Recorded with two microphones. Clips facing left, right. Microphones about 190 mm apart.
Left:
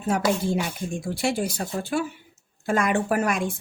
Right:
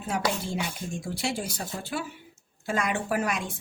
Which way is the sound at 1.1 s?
55° left (ahead or behind).